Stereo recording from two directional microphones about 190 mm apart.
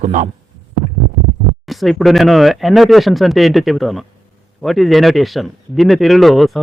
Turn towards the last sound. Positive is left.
turn(degrees=0)  # may be behind; listen again after turning